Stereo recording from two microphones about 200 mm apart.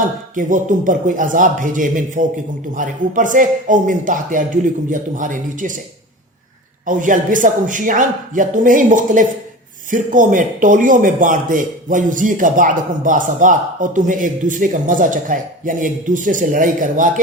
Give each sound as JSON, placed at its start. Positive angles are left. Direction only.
{"t": 0.3, "sound": "a man's voice", "side_deg": -40}
{"t": 6.8, "sound": "a man's voice", "side_deg": -40}